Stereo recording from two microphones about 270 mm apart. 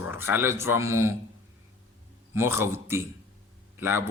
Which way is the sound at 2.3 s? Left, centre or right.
Centre.